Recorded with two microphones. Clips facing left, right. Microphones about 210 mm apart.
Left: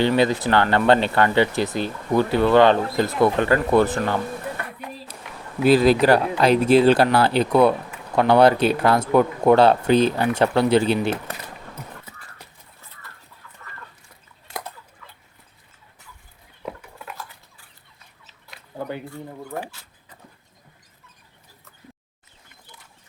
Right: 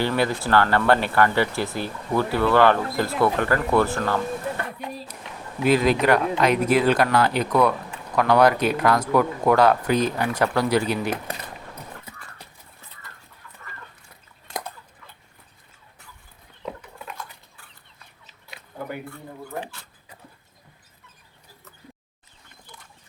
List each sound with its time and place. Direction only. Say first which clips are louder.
0.0 s speech: left 4 dB; 20° left (ahead or behind)
5.6 s speech: left 4 dB; 35° left (ahead or behind)